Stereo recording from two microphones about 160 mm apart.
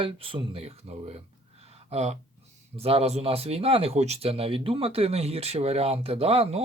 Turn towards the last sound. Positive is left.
turn(degrees=-40)  # may be behind; listen again after turning